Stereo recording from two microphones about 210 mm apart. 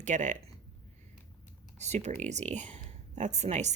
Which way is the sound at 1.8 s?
30° right (ahead or behind).